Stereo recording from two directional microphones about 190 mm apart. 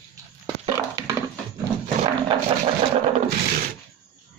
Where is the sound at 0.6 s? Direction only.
20° right (ahead or behind).